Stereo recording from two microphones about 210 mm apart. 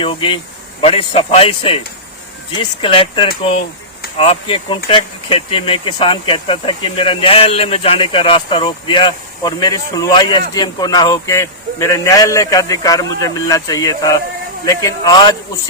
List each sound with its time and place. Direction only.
0.0 s a man's voice: 25° left (ahead or behind)